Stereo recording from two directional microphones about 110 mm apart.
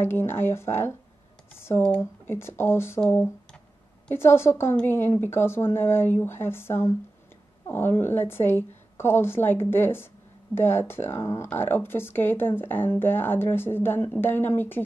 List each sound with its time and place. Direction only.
0.0 s speech: 20° left (ahead or behind)
2.2 s speech: 20° left (ahead or behind)
4.1 s speech: 20° left (ahead or behind)